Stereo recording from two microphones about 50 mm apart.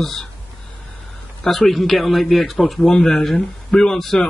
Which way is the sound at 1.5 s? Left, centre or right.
Centre.